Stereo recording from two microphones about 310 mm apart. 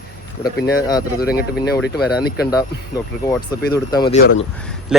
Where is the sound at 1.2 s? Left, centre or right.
Left.